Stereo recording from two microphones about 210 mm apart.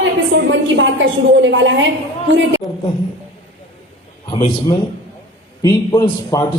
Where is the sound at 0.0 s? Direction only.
60° right (ahead or behind).